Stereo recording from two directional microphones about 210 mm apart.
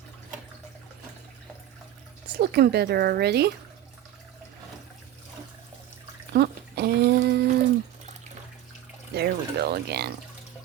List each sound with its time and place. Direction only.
2.4 s speech: 50° right (ahead or behind)
6.3 s a sound: 50° right (ahead or behind)
7.3 s speech: 50° right (ahead or behind)
9.1 s speech: 50° right (ahead or behind)